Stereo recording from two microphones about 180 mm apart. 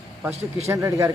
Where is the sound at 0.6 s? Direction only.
15° right (ahead or behind).